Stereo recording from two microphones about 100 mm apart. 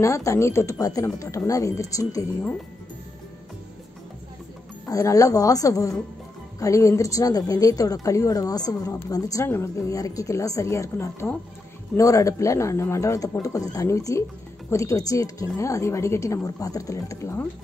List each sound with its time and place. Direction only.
0.0 s a woman's voice: 30° left (ahead or behind)
4.8 s a woman's voice: 35° left (ahead or behind)